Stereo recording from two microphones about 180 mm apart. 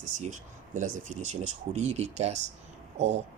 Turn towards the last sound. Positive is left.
turn(degrees=-40)  # may be behind; listen again after turning